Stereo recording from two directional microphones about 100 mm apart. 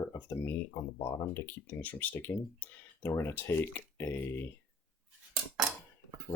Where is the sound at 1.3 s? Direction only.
25° left (ahead or behind).